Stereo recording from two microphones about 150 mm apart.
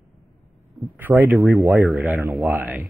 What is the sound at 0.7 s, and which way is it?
Speech, 15° right (ahead or behind).